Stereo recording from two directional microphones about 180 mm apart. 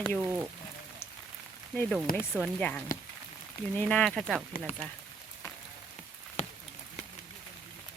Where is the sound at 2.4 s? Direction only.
5° left (ahead or behind).